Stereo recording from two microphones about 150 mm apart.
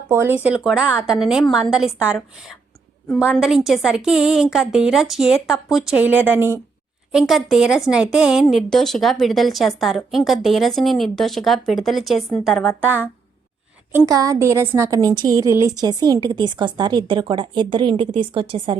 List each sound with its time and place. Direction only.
0.1 s speech: 15° right (ahead or behind)
7.1 s speech: 5° right (ahead or behind)
12.8 s a woman's voice: 15° right (ahead or behind); by 18.8 s 35° right (ahead or behind)